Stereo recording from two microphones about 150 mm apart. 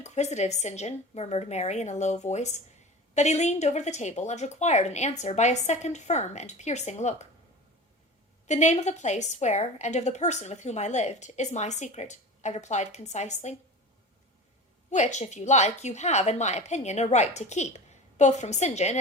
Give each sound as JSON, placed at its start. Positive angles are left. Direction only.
{"t": 0.0, "sound": "a woman's voice", "side_deg": 50}
{"t": 8.4, "sound": "a woman's voice", "side_deg": 50}
{"t": 14.8, "sound": "a woman's voice", "side_deg": 50}